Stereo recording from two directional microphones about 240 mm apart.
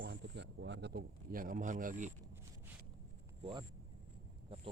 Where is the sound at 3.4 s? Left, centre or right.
Right.